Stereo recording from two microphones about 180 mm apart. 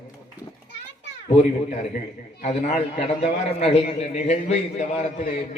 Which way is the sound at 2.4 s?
35° left (ahead or behind).